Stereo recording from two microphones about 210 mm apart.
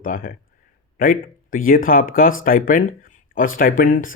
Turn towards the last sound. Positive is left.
turn(degrees=40)  # may be behind; listen again after turning